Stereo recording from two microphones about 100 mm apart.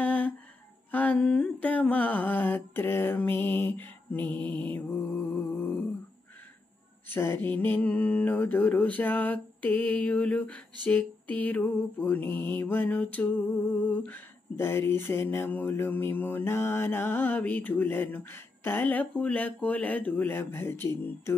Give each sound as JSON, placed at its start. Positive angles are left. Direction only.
{"t": 0.0, "sound": "music", "side_deg": 15}
{"t": 1.2, "sound": "humming", "side_deg": 10}
{"t": 7.2, "sound": "humming", "side_deg": 25}
{"t": 14.6, "sound": "mantra", "side_deg": 25}